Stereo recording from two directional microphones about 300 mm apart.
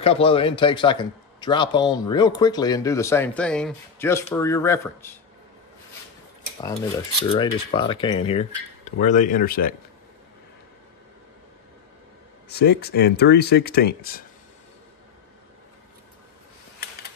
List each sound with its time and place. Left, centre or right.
0.0 s speech: centre
6.6 s speech: centre
12.4 s speech: left